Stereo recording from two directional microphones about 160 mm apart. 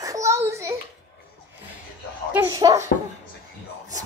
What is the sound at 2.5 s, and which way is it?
Speech, 20° right (ahead or behind).